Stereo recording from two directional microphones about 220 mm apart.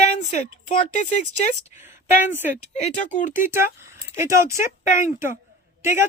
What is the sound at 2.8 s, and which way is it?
Speech, 35° left (ahead or behind).